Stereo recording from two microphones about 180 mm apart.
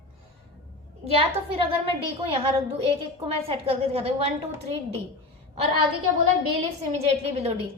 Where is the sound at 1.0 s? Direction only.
35° right (ahead or behind).